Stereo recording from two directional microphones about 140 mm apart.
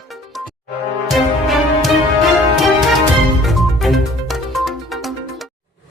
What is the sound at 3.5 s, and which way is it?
Music, centre (ahead or behind).